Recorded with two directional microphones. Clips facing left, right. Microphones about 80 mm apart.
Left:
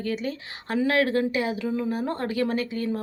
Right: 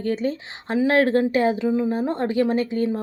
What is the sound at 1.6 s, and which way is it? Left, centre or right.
Speech, right.